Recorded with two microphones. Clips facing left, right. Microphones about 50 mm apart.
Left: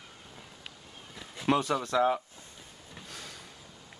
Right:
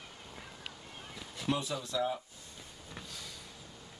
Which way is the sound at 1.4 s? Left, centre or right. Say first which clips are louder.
Left 7 dB; left.